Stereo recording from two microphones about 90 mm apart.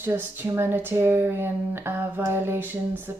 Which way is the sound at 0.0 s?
25° right (ahead or behind).